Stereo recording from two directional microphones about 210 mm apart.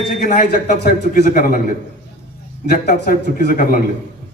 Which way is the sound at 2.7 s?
40° left (ahead or behind).